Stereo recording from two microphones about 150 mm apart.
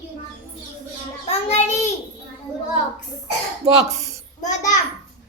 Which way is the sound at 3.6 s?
45° right (ahead or behind).